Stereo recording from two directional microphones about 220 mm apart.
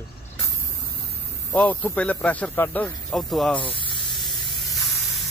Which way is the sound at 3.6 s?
25° left (ahead or behind).